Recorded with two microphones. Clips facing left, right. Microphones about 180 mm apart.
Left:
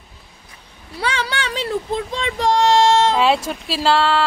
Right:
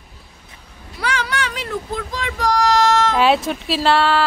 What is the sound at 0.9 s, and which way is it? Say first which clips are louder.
Child singing: even; 30° left (ahead or behind).